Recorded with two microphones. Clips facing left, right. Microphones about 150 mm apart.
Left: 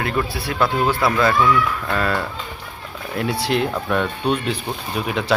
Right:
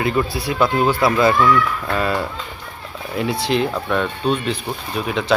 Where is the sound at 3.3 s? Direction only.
5° left (ahead or behind).